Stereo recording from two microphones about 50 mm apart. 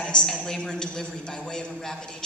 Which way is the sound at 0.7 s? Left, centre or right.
Centre.